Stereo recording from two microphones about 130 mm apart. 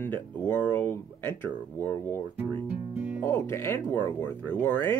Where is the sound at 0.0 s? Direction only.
15° left (ahead or behind).